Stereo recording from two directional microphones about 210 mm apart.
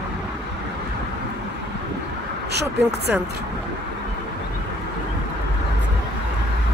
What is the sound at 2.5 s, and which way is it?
Speech, 50° right (ahead or behind).